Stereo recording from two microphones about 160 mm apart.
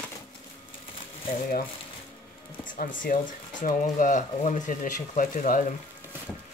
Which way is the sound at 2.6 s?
55° left (ahead or behind).